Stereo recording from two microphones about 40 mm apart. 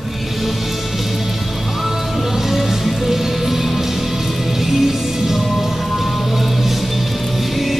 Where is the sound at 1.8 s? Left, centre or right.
Centre.